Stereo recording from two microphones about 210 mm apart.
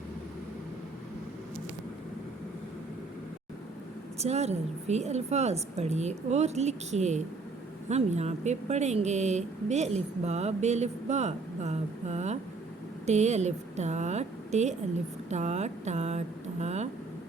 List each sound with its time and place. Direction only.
4.2 s a woman's voice: 30° right (ahead or behind)